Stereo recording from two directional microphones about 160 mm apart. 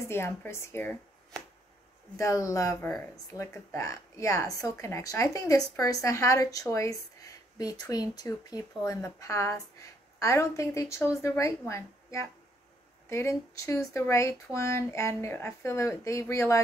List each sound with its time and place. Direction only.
0.1 s speech: 15° left (ahead or behind)
2.1 s speech: 20° left (ahead or behind)